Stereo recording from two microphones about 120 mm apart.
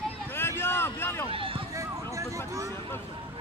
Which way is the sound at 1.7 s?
25° right (ahead or behind).